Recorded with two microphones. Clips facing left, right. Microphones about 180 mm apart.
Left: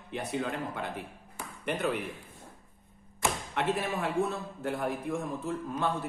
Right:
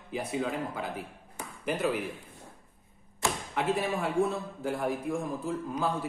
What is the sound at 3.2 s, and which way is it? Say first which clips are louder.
A man's voice: even; centre (ahead or behind).